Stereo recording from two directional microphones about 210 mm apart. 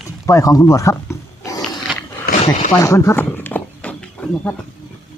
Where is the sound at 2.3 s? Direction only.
45° left (ahead or behind).